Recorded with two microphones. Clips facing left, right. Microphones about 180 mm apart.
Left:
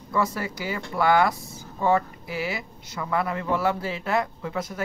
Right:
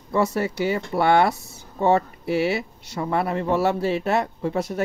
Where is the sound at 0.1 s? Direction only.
25° right (ahead or behind).